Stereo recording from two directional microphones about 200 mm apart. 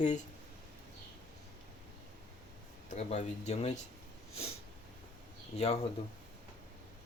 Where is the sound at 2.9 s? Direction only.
35° left (ahead or behind).